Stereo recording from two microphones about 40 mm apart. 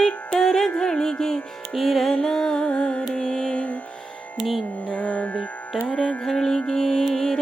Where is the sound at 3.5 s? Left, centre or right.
Left.